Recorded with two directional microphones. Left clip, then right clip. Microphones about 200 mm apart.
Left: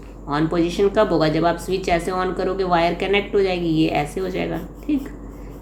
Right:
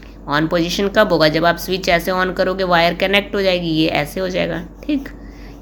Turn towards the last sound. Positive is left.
turn(degrees=-30)  # may be behind; listen again after turning